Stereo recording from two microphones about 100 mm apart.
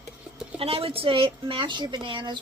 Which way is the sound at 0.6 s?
70° right (ahead or behind).